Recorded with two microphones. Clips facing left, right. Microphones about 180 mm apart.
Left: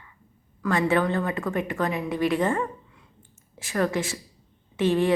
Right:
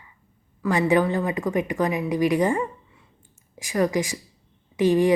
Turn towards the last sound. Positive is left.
turn(degrees=-15)  # may be behind; listen again after turning